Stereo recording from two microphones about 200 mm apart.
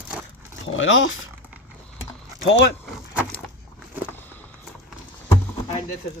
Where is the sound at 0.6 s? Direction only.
75° left (ahead or behind).